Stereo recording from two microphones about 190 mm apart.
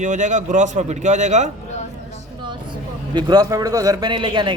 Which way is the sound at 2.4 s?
25° right (ahead or behind).